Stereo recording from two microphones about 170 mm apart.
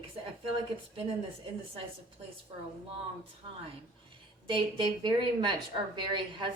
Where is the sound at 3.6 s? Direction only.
30° right (ahead or behind).